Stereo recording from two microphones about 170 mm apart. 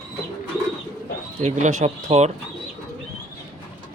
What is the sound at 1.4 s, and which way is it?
Speech, 45° right (ahead or behind).